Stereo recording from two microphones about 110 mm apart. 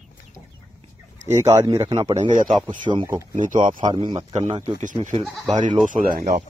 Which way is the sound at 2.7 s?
45° right (ahead or behind).